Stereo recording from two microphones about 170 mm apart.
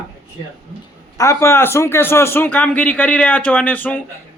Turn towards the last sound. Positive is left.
turn(degrees=10)  # may be behind; listen again after turning